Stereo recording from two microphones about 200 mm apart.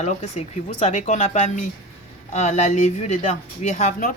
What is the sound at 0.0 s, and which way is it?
Speech, 35° left (ahead or behind).